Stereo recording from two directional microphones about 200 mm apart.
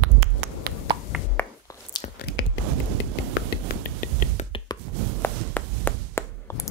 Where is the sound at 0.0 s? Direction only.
90° right.